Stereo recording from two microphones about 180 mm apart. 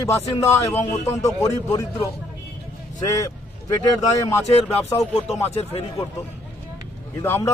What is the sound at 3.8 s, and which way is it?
Speech, 20° left (ahead or behind).